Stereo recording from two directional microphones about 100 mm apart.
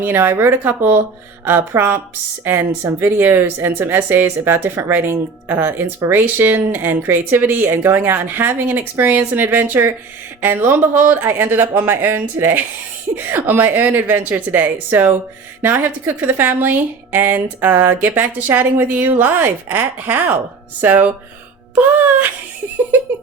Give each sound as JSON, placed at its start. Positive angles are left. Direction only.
{"t": 0.0, "sound": "speech", "side_deg": -20}